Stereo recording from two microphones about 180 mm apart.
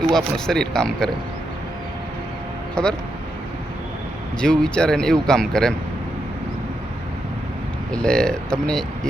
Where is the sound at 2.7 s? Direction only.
5° left (ahead or behind).